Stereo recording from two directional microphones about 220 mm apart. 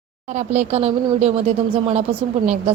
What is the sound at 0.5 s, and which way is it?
A woman's voice, 30° right (ahead or behind).